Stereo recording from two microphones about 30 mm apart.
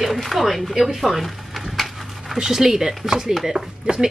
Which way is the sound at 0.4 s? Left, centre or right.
Centre.